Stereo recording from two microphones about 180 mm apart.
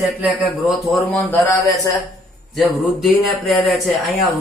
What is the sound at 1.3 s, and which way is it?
Speech, 15° left (ahead or behind).